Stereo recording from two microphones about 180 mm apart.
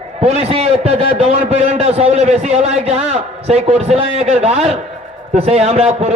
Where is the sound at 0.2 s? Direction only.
35° right (ahead or behind).